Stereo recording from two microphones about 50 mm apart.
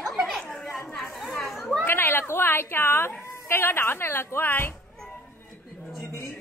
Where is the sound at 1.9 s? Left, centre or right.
Left.